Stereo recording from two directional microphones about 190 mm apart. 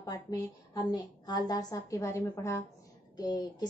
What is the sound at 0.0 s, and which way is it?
A woman's voice, 20° left (ahead or behind).